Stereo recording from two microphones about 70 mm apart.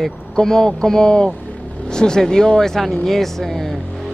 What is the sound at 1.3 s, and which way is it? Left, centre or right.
Vehicle, left.